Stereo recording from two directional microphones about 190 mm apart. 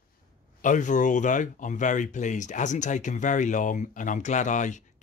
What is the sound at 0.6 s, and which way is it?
Speech, 40° left (ahead or behind).